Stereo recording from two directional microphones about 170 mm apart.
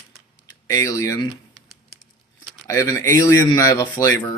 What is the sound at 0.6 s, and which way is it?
Speech, 20° left (ahead or behind).